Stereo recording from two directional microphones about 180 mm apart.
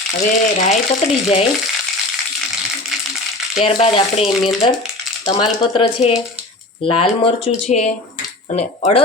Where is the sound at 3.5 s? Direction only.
30° left (ahead or behind).